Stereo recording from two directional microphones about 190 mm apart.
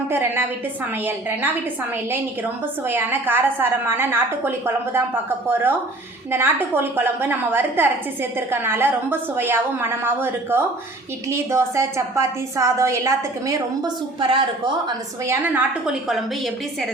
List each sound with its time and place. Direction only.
0.1 s a woman's voice: 10° right (ahead or behind)
2.8 s a woman's voice: 10° right (ahead or behind)
15.3 s a woman's voice: 10° right (ahead or behind)